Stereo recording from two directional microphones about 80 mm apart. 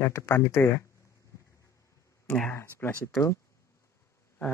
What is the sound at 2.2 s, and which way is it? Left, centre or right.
Speech, centre.